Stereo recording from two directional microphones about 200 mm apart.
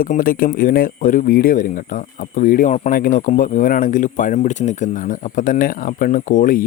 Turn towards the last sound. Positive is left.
turn(degrees=40)  # may be behind; listen again after turning